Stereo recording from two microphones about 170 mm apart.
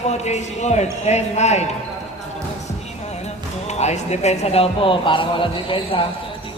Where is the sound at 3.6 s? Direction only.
40° left (ahead or behind).